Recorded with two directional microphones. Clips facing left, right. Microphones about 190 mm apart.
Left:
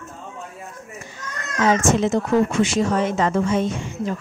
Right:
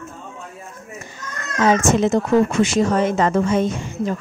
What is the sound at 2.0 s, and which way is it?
A woman's voice, 45° right (ahead or behind).